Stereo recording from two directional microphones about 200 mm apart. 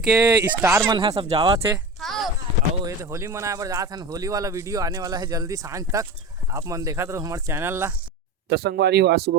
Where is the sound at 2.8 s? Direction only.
15° right (ahead or behind).